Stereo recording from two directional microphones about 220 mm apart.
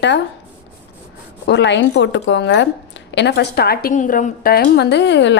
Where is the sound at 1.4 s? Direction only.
50° left (ahead or behind).